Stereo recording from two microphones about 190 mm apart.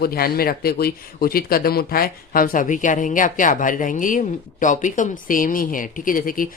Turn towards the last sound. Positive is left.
turn(degrees=45)  # may be behind; listen again after turning